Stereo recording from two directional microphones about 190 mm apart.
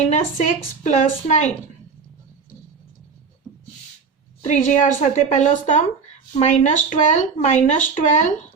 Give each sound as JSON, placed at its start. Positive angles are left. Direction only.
{"t": 0.2, "sound": "speech", "side_deg": 40}
{"t": 4.4, "sound": "speech", "side_deg": 40}